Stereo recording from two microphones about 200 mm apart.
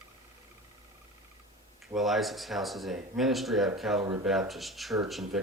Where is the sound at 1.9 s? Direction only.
Centre (ahead or behind).